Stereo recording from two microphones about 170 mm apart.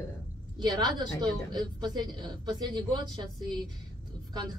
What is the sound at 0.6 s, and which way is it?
A woman's voice, 25° right (ahead or behind).